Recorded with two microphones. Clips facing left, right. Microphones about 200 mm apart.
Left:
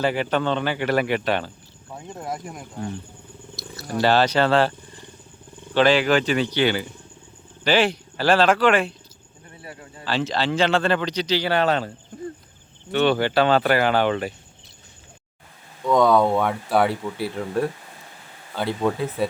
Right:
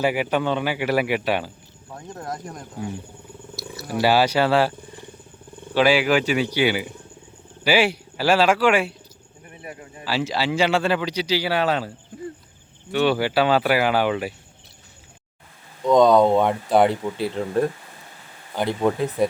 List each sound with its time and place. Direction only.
0.0 s speech: 10° right (ahead or behind)
1.9 s speech: 5° left (ahead or behind)
3.5 s speech: 10° right (ahead or behind)
5.7 s speech: 10° right (ahead or behind)
9.5 s a sound: 20° right (ahead or behind)
10.0 s speech: 10° right (ahead or behind)
12.9 s speech: 5° right (ahead or behind)
15.8 s speech: 20° right (ahead or behind)